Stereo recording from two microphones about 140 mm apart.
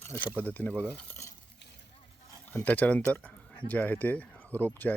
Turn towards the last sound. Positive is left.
turn(degrees=15)  # may be behind; listen again after turning